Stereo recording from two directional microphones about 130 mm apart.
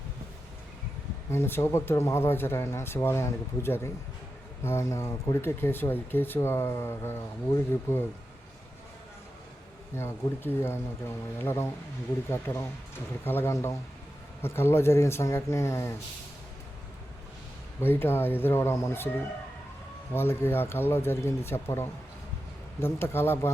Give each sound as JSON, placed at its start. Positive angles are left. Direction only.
{"t": 1.3, "sound": "speech", "side_deg": 20}
{"t": 9.9, "sound": "speech", "side_deg": 20}
{"t": 17.7, "sound": "speech", "side_deg": 15}
{"t": 20.1, "sound": "speech", "side_deg": 15}